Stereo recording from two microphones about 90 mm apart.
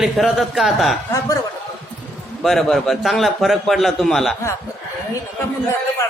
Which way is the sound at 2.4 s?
5° left (ahead or behind).